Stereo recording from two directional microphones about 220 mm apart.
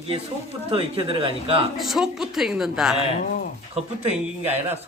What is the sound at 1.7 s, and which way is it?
A woman's voice, centre (ahead or behind).